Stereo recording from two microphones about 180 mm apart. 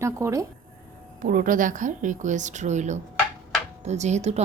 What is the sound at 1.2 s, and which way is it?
A woman's voice, 50° right (ahead or behind).